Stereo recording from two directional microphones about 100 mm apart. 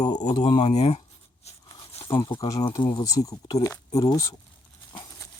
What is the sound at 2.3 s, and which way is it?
Speech, 35° left (ahead or behind).